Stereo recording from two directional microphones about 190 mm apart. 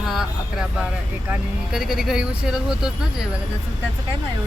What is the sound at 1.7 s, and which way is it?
Speech, centre (ahead or behind).